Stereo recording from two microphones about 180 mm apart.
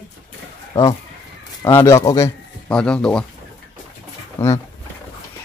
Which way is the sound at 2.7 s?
5° left (ahead or behind).